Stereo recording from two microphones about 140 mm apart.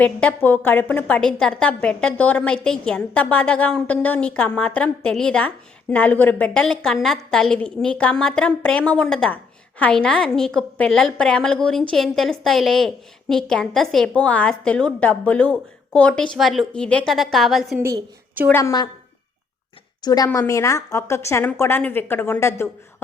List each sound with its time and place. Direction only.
0.0 s a woman's voice: 10° left (ahead or behind)
17.7 s a woman's voice: 20° right (ahead or behind)
18.5 s a woman's voice: 25° left (ahead or behind)
20.0 s a woman's voice: 30° left (ahead or behind)